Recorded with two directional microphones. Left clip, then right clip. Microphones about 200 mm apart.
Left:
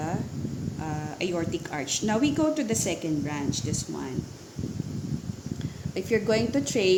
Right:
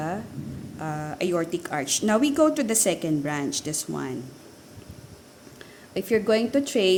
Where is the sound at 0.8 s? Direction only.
30° right (ahead or behind).